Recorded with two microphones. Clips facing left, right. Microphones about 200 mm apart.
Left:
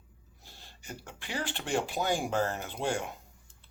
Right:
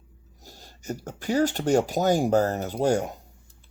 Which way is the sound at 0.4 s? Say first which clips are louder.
Right 12 dB; 40° right (ahead or behind).